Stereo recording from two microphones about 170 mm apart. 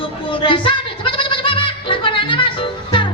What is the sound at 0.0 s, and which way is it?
Music, 30° left (ahead or behind).